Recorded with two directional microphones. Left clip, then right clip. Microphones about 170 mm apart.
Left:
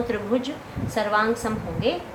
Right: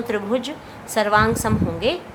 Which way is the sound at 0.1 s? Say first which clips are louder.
Right 2 dB; 40° right (ahead or behind).